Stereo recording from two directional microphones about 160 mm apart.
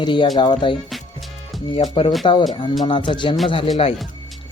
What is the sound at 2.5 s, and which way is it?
Speech, 30° left (ahead or behind).